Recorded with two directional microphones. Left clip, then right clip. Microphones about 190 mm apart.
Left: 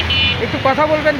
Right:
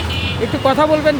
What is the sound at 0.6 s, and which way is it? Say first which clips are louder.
Speech: right 1 dB; 30° right (ahead or behind).